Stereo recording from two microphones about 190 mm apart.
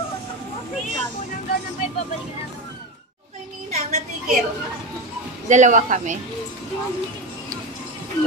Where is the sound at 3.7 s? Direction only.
35° right (ahead or behind).